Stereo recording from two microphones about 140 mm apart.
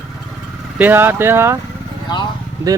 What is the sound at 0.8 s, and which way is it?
Speech, 15° right (ahead or behind).